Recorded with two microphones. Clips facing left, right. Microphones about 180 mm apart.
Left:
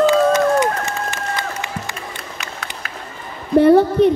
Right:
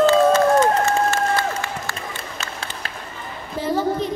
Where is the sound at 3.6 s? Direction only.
65° left (ahead or behind).